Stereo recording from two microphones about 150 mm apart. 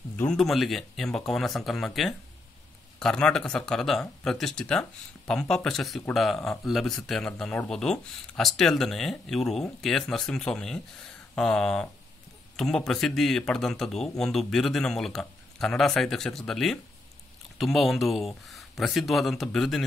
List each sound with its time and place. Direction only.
0.2 s a man's voice: 5° left (ahead or behind)